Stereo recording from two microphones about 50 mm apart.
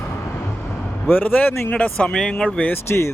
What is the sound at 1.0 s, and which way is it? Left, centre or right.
Speech, left.